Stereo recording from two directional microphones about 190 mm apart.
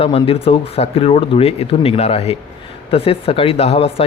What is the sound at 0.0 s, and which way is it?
Speech, 30° left (ahead or behind).